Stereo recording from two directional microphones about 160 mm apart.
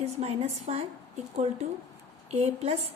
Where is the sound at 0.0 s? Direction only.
40° right (ahead or behind).